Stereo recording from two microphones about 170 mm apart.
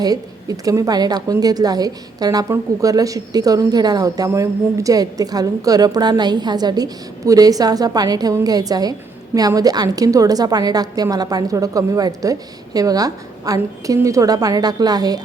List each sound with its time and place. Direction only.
0.0 s a woman's voice: 20° right (ahead or behind)